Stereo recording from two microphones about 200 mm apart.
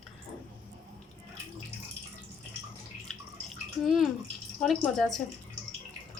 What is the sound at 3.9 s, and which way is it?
A woman's voice, centre (ahead or behind).